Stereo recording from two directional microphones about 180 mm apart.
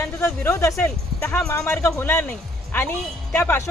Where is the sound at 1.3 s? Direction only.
5° left (ahead or behind).